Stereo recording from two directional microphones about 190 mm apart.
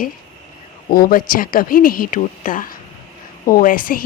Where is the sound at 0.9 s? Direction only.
50° left (ahead or behind).